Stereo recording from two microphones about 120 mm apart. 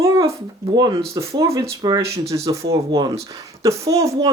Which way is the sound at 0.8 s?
35° right (ahead or behind).